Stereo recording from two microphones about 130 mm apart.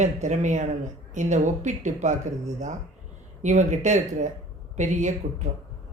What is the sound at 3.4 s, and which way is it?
A woman's voice, 65° right (ahead or behind).